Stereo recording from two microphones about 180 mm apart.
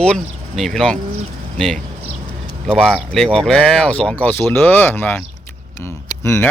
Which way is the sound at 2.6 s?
5° left (ahead or behind).